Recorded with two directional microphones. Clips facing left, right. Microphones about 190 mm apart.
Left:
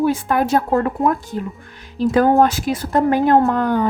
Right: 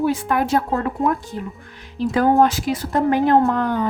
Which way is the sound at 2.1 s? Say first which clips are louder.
Left 2 dB; 50° left (ahead or behind).